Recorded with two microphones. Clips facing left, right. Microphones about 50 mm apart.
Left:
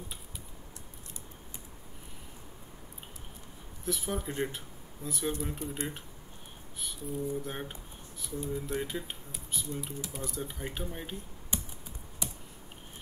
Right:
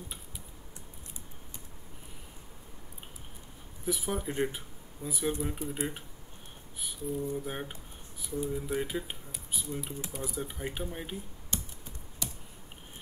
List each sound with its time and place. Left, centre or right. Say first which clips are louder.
3.8 s speech: right 1 dB; centre
11.5 s typing: even; centre
12.2 s computer keyboard: even; centre